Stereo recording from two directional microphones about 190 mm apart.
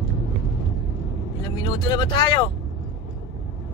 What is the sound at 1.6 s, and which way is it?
Speech, 25° left (ahead or behind).